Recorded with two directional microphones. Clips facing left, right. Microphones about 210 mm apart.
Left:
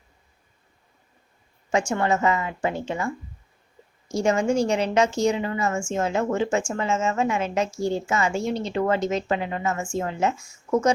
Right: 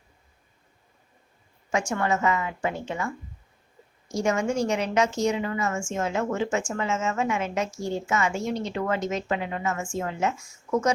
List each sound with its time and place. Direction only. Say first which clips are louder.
1.9 s a woman's voice: left 1 dB; 30° left (ahead or behind)
4.1 s a woman's voice: left 3 dB; 30° left (ahead or behind)